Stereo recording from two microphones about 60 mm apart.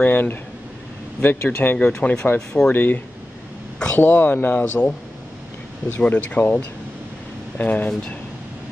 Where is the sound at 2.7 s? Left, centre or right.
Left.